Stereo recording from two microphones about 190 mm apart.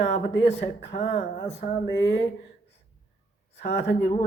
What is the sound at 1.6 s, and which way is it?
Speech, 40° left (ahead or behind).